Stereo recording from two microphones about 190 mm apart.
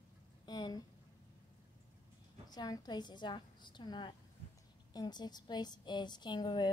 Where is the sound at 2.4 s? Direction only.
20° left (ahead or behind).